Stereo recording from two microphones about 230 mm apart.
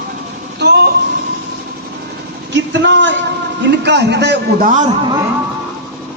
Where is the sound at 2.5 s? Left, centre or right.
Right.